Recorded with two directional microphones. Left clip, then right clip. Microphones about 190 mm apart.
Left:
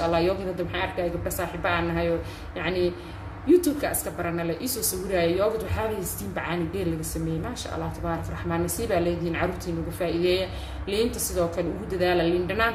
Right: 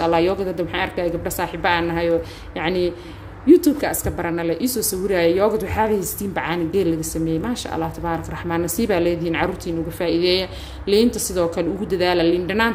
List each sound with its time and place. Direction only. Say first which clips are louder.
0.0 s a woman's voice: right 6 dB; 40° right (ahead or behind)